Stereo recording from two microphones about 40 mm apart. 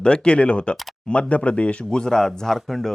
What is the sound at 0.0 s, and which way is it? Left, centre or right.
Speech, left.